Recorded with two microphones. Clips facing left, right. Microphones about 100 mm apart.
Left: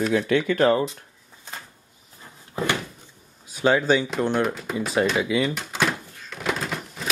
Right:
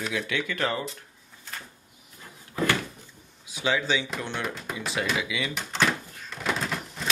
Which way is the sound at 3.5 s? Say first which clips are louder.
Left 7 dB; 45° left (ahead or behind).